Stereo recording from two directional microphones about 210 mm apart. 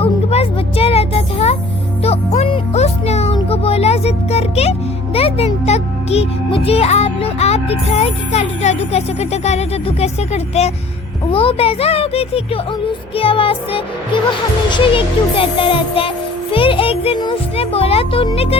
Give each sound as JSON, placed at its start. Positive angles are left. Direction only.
{"t": 0.0, "sound": "music", "side_deg": 30}
{"t": 5.1, "sound": "a child's voice", "side_deg": 30}
{"t": 11.3, "sound": "child singing", "side_deg": 25}